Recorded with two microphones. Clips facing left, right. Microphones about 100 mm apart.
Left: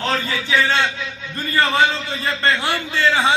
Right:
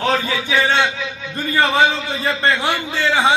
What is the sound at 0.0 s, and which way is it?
A man's voice, 15° right (ahead or behind).